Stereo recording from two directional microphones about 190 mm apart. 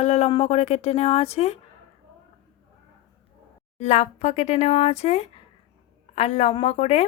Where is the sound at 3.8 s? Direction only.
35° left (ahead or behind).